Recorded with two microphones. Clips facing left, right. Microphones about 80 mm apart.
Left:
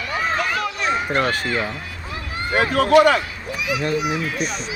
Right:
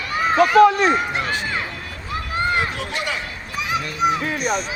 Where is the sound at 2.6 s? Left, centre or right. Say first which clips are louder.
Left 10 dB; left.